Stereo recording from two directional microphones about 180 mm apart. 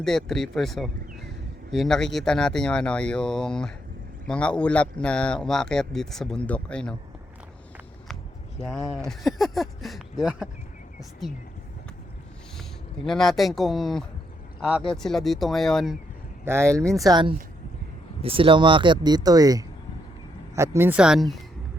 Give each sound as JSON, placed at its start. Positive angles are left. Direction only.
{"t": 0.0, "sound": "a man's voice", "side_deg": 5}
{"t": 8.5, "sound": "a man's voice", "side_deg": 0}
{"t": 13.1, "sound": "a man's voice", "side_deg": 0}
{"t": 16.5, "sound": "speech", "side_deg": -15}
{"t": 17.1, "sound": "a man's voice", "side_deg": -25}